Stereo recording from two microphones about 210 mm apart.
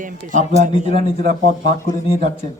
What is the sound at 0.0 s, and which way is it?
Speech, 40° right (ahead or behind).